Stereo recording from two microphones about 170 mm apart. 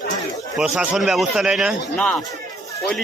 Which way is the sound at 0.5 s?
Centre (ahead or behind).